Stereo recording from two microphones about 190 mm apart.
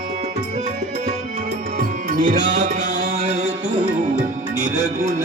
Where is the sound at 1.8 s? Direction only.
45° right (ahead or behind).